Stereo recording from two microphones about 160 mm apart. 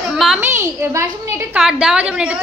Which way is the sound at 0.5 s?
15° right (ahead or behind).